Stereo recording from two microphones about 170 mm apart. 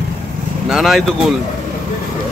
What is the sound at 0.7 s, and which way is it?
Speech, centre (ahead or behind).